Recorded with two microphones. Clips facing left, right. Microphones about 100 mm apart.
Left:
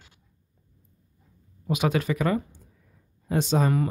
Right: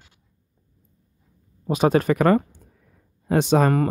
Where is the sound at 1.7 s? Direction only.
35° right (ahead or behind).